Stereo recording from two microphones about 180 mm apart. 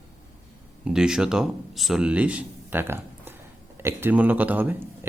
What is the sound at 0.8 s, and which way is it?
Speech, 5° right (ahead or behind).